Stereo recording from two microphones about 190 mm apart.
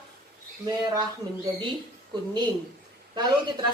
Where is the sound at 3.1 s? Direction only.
25° right (ahead or behind).